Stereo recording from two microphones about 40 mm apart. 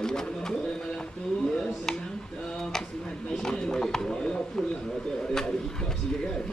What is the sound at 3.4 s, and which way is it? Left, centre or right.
Bird, centre.